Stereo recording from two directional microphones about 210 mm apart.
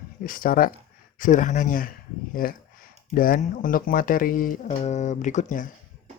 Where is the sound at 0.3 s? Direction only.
40° left (ahead or behind).